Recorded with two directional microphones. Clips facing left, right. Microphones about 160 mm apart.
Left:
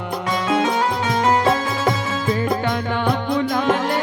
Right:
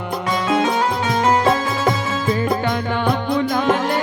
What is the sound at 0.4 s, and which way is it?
Music, 10° right (ahead or behind).